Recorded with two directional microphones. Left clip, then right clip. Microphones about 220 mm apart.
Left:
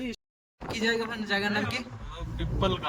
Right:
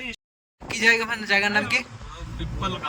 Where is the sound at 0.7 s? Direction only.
Centre (ahead or behind).